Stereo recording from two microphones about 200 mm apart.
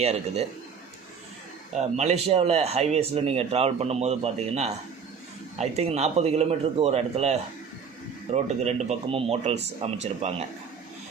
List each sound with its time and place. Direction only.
0.0 s speech: 30° right (ahead or behind)
1.7 s speech: 35° right (ahead or behind)